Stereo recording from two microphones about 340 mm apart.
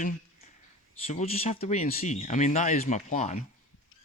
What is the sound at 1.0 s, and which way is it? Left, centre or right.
Speech, centre.